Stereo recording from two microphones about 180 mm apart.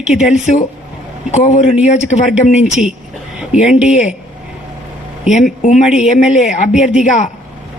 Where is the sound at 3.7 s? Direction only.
5° right (ahead or behind).